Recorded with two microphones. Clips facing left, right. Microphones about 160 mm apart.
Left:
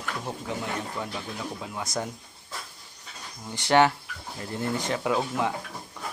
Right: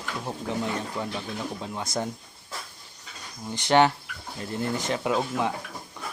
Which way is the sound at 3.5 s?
20° right (ahead or behind).